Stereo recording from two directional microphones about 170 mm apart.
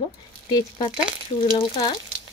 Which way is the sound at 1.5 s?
30° left (ahead or behind).